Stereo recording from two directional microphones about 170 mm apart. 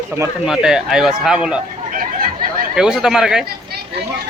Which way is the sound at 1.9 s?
55° right (ahead or behind).